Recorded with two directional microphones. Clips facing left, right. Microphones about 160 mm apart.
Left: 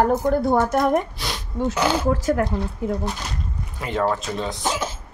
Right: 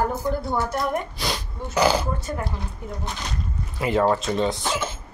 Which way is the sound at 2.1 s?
90° left.